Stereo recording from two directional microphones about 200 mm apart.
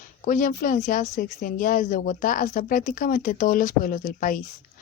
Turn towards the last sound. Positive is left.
turn(degrees=40)  # may be behind; listen again after turning